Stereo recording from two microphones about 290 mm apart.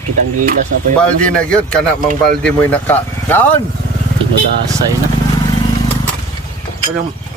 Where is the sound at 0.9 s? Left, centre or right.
Centre.